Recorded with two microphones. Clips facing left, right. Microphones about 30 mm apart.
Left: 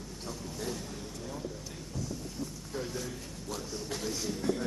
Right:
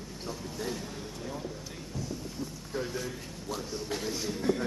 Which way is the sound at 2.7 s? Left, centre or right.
Centre.